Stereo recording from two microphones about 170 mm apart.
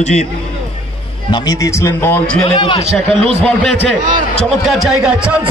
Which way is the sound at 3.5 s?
5° left (ahead or behind).